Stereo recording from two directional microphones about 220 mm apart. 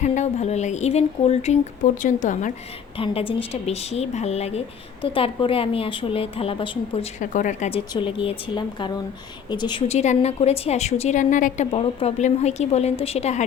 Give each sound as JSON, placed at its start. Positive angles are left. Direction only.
{"t": 0.0, "sound": "a woman's voice", "side_deg": 30}
{"t": 3.0, "sound": "a woman's voice", "side_deg": 25}
{"t": 7.2, "sound": "a woman's voice", "side_deg": 35}